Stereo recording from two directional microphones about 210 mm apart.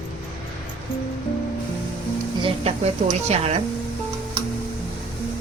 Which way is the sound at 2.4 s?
25° right (ahead or behind).